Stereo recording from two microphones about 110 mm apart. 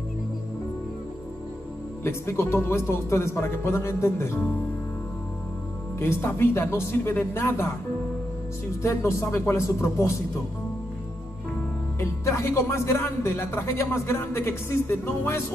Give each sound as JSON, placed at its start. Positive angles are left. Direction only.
{"t": 2.0, "sound": "speech", "side_deg": 25}
{"t": 5.9, "sound": "speech", "side_deg": 20}
{"t": 8.8, "sound": "speech", "side_deg": 25}
{"t": 12.0, "sound": "speech", "side_deg": 25}